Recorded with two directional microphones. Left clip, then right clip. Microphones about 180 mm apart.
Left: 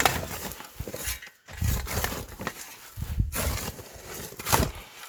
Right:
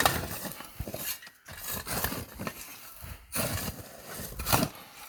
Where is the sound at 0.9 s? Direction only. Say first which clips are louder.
Left 3 dB; 15° left (ahead or behind).